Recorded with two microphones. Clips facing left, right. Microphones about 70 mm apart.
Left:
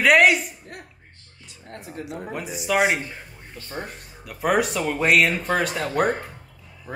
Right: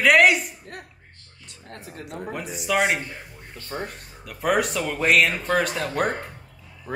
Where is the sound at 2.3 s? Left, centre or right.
Centre.